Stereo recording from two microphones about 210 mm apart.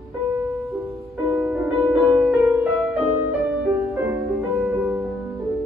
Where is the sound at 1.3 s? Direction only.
10° right (ahead or behind).